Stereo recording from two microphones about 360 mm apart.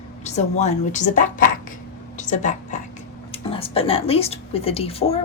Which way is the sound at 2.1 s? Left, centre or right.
Left.